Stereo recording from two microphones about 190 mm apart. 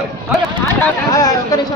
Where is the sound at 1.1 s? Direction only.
20° left (ahead or behind).